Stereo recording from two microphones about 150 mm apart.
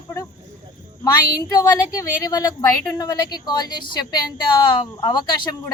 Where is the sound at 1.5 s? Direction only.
25° left (ahead or behind).